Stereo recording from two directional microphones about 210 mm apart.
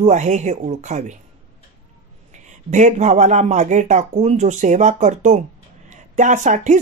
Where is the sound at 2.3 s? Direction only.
35° right (ahead or behind).